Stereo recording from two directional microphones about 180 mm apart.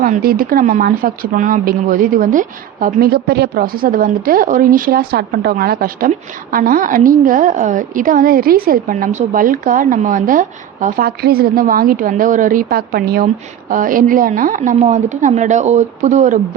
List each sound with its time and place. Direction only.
0.0 s speech: 50° right (ahead or behind)